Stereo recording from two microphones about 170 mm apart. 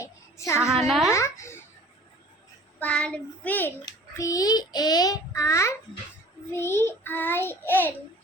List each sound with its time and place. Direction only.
0.0 s a sound: 15° left (ahead or behind)
0.9 s a child's voice: centre (ahead or behind)
1.1 s a child's voice: 15° left (ahead or behind)
2.7 s child singing: 5° left (ahead or behind)
3.8 s child singing: 20° left (ahead or behind)